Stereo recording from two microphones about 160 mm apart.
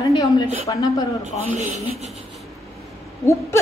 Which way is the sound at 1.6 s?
45° right (ahead or behind).